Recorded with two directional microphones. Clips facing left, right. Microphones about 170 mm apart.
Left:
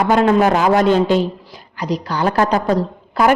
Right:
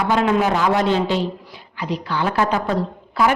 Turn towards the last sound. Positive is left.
turn(degrees=45)  # may be behind; listen again after turning